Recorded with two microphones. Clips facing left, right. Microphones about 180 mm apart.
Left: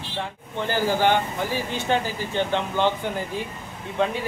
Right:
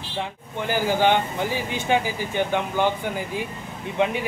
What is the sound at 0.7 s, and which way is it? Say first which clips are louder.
Speech: right 1 dB; 15° right (ahead or behind).